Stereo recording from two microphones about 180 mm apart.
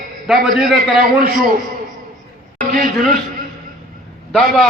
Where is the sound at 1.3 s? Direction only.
50° right (ahead or behind).